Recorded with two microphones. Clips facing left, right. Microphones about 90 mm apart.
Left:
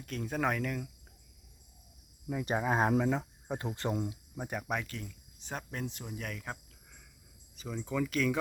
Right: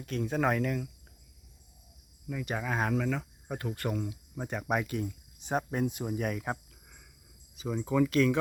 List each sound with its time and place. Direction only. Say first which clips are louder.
0.0 s speech: right 4 dB; centre (ahead or behind)
2.2 s speech: left 3 dB; 30° left (ahead or behind)
4.4 s speech: right 2 dB; 5° left (ahead or behind)
4.6 s speech: right 6 dB; 10° right (ahead or behind)
7.5 s speech: right 6 dB; 5° right (ahead or behind)